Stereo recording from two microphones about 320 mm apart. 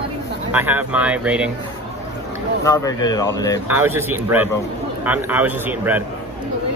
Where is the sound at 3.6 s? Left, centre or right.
Centre.